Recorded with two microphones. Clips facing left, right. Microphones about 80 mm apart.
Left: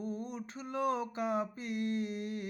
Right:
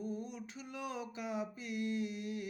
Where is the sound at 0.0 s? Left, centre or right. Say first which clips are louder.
Left 3 dB; left.